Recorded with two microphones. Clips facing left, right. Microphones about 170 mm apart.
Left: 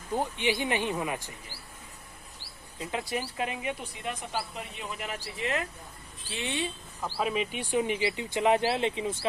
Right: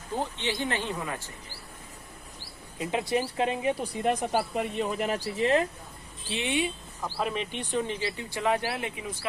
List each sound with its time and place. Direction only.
0.1 s speech: 15° left (ahead or behind)
2.7 s speech: 20° right (ahead or behind)
4.0 s speech: 45° right (ahead or behind)
6.2 s speech: 15° right (ahead or behind)
7.0 s speech: 5° left (ahead or behind); by 9.1 s 25° left (ahead or behind)